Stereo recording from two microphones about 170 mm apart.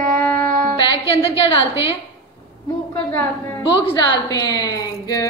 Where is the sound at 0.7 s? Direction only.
30° left (ahead or behind).